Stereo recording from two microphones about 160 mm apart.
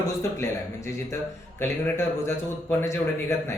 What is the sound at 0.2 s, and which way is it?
Speech, 20° left (ahead or behind).